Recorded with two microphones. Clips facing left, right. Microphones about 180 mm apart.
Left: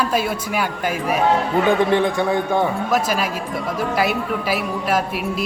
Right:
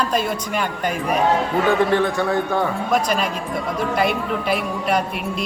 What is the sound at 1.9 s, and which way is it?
Speech, 15° left (ahead or behind).